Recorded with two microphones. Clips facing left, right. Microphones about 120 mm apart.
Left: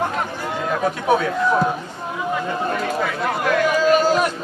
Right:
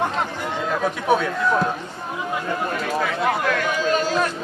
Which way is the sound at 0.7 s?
Centre (ahead or behind).